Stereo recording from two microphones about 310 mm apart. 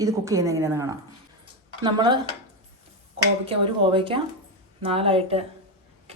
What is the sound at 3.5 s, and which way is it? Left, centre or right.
A woman's voice, centre.